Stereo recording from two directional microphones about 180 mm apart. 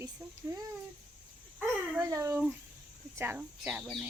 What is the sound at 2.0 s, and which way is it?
A woman's voice, 15° right (ahead or behind).